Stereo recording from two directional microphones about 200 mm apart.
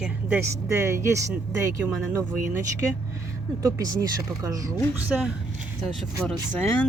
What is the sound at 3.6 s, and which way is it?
A woman's voice, 20° right (ahead or behind).